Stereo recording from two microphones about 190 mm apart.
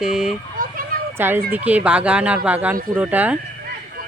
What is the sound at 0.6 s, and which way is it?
Children playing, 45° right (ahead or behind).